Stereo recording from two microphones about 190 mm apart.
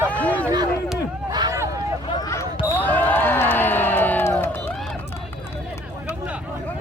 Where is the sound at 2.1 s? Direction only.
20° left (ahead or behind).